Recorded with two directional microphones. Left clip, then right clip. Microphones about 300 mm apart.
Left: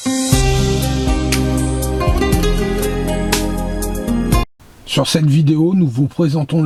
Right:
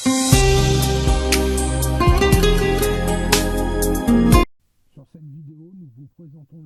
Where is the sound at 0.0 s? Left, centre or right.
Centre.